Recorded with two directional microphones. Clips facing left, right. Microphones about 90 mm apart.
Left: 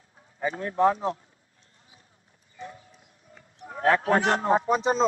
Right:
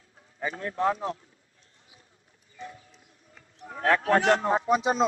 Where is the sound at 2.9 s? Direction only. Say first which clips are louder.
Left 2 dB; 30° left (ahead or behind).